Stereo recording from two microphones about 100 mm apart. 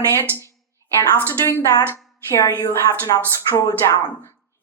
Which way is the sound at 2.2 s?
30° left (ahead or behind).